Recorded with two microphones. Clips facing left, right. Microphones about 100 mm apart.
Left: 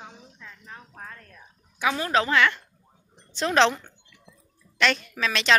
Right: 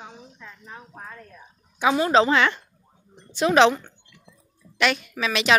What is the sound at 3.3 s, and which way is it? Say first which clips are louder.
A woman's voice: right 4 dB; 10° right (ahead or behind).